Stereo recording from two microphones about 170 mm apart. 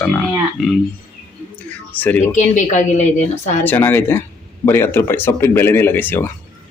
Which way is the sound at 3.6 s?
10° left (ahead or behind).